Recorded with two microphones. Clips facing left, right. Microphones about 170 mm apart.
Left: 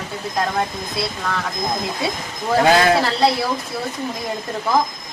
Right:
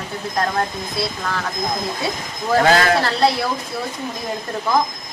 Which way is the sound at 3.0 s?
Centre (ahead or behind).